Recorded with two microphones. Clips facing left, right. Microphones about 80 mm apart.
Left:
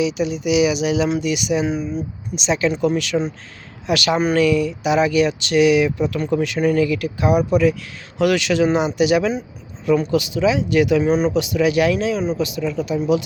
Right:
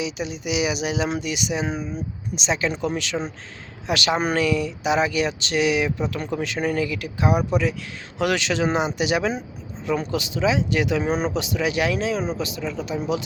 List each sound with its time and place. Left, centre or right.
0.0 s speech: right
1.7 s speech: centre
2.3 s speech: right